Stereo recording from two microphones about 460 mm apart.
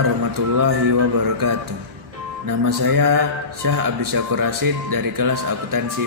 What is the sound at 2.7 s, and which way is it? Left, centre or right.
A man's voice, right.